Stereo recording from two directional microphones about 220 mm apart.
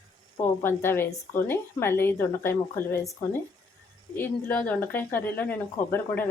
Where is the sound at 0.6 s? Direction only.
10° left (ahead or behind).